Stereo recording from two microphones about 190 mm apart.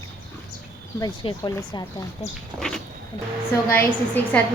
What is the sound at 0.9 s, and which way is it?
Speech, 25° left (ahead or behind).